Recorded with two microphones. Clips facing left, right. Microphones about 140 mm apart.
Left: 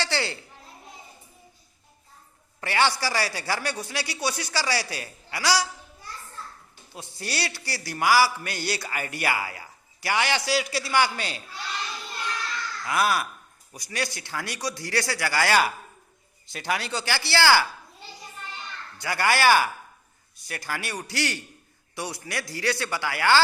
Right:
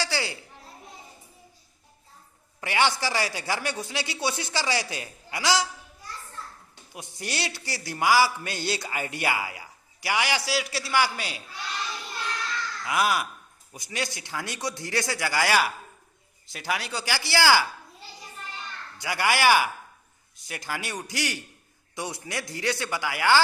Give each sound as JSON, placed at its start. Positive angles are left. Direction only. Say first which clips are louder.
{"t": 0.0, "sound": "children playing", "louder": "left 1 dB", "side_deg": -10}
{"t": 2.6, "sound": "a man's voice", "louder": "left 1 dB", "side_deg": -15}
{"t": 6.9, "sound": "a man's voice", "louder": "left 1 dB", "side_deg": -20}
{"t": 12.8, "sound": "a man's voice", "louder": "left 1 dB", "side_deg": -15}
{"t": 16.5, "sound": "a man's voice", "louder": "left 2 dB", "side_deg": -5}
{"t": 18.9, "sound": "a man's voice", "louder": "left 1 dB", "side_deg": -15}